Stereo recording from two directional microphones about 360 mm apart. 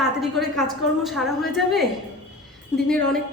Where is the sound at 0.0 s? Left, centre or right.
Centre.